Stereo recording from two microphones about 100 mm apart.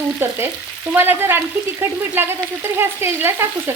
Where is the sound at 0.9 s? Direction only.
20° right (ahead or behind).